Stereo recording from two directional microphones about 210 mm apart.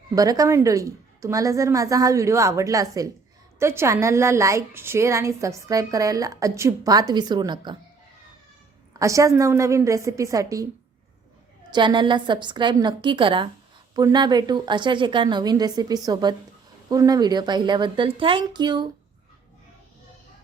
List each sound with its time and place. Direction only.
0.1 s a woman's voice: 15° right (ahead or behind)
8.9 s a woman's voice: 15° right (ahead or behind)
11.7 s a woman's voice: 20° right (ahead or behind)